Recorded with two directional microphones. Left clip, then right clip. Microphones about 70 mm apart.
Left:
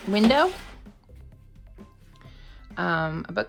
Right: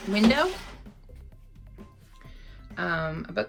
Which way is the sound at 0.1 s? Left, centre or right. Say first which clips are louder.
Left 3 dB; left.